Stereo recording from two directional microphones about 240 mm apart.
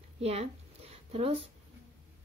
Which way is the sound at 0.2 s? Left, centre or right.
Right.